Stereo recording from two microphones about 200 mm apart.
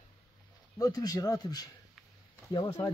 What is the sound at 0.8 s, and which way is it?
A child's voice, 20° left (ahead or behind).